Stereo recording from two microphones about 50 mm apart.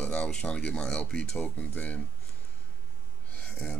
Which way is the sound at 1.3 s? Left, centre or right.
Left.